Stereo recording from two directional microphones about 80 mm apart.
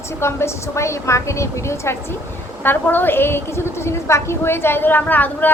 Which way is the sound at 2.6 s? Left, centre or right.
Left.